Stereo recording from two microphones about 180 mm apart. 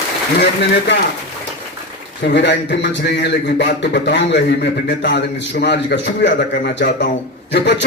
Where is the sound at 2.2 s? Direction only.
80° left.